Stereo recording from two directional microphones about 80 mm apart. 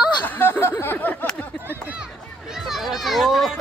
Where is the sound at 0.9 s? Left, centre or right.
Centre.